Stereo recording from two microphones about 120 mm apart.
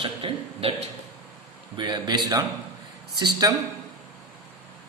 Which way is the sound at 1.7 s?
40° right (ahead or behind).